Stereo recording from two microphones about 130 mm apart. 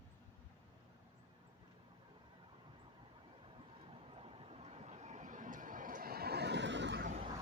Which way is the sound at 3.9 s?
45° right (ahead or behind).